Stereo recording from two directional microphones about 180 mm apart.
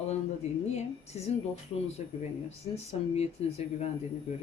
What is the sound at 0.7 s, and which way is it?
Speech, 40° left (ahead or behind).